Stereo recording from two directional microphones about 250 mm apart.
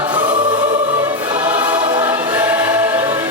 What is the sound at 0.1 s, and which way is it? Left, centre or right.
Choir, centre.